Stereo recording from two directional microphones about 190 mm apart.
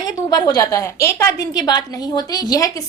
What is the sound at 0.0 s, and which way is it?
A woman's voice, 20° left (ahead or behind).